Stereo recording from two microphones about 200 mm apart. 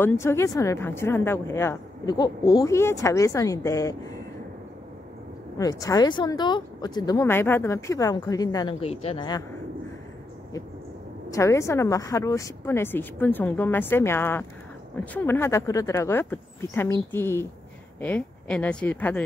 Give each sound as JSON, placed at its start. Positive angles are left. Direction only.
{"t": 0.0, "sound": "a woman's voice", "side_deg": 15}
{"t": 5.6, "sound": "speech", "side_deg": 15}
{"t": 8.8, "sound": "speech", "side_deg": 30}
{"t": 11.2, "sound": "a woman's voice", "side_deg": 15}